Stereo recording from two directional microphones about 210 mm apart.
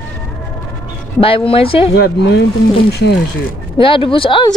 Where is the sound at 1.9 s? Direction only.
50° left (ahead or behind).